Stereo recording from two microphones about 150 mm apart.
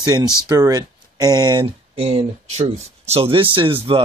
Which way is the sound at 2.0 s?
40° right (ahead or behind).